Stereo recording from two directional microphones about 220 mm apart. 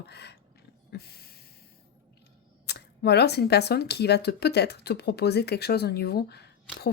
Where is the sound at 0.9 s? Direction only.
45° left (ahead or behind).